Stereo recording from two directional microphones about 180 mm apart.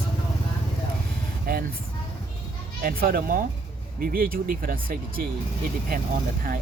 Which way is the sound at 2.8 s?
55° right (ahead or behind).